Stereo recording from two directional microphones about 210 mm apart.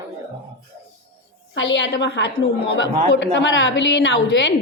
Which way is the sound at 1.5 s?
60° left (ahead or behind).